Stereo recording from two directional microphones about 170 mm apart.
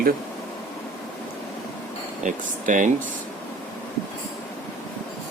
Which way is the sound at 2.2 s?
50° right (ahead or behind).